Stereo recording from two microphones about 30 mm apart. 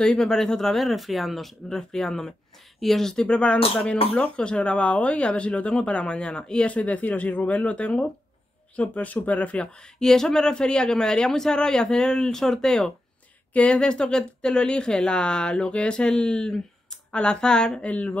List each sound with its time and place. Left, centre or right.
0.0 s speech: centre
0.7 s speech: centre
1.7 s speech: centre
3.3 s speech: left
6.9 s speech: left
8.7 s speech: left
9.9 s speech: centre
13.7 s speech: left
17.7 s speech: left